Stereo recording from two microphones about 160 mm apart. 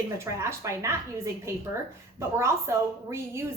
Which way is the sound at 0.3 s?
15° right (ahead or behind).